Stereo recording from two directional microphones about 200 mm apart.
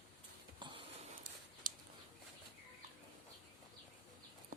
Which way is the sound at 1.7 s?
45° right (ahead or behind).